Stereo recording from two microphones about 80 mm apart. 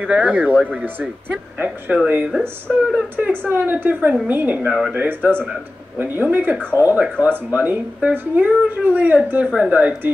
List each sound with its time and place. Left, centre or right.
0.0 s speech: centre